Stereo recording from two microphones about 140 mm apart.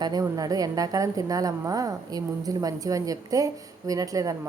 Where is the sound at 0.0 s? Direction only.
25° right (ahead or behind).